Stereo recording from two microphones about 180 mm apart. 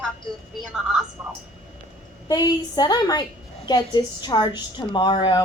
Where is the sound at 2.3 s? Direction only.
20° left (ahead or behind).